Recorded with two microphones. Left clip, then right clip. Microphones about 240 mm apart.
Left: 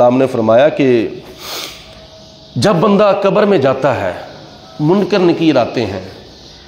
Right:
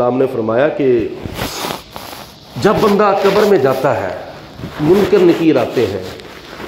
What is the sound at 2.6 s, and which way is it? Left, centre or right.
A man's voice, left.